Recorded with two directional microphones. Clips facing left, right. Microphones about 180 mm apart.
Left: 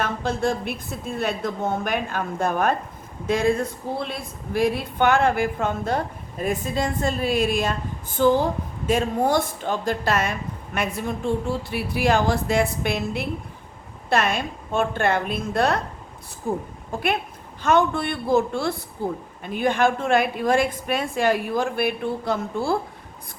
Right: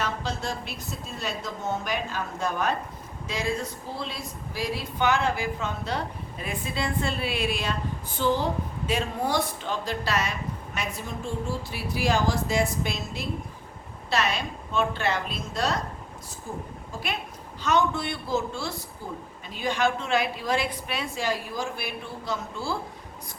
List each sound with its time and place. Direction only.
0.0 s a woman's voice: 55° left (ahead or behind)